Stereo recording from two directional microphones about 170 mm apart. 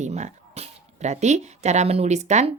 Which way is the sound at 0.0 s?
45° right (ahead or behind).